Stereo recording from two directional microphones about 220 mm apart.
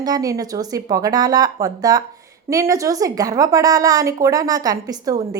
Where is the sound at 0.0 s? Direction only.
15° right (ahead or behind).